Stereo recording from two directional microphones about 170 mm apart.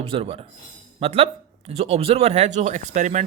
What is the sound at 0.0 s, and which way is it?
A man's voice, 35° right (ahead or behind).